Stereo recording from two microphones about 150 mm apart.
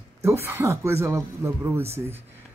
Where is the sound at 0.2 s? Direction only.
15° right (ahead or behind).